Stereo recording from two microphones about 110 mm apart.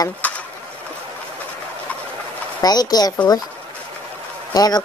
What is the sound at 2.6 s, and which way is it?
Speech, 35° left (ahead or behind).